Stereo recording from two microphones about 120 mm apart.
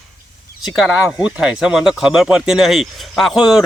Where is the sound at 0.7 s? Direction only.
10° right (ahead or behind).